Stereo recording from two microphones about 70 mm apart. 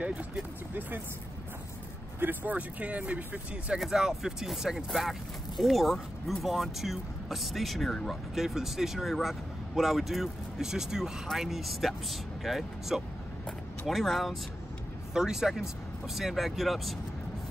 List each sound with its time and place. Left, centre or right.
2.1 s speech: right
3.8 s speech: centre